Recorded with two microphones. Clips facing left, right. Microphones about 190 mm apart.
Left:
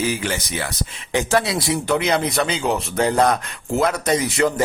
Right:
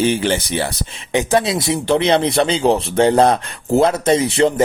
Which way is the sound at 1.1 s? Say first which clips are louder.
Right 3 dB; 20° right (ahead or behind).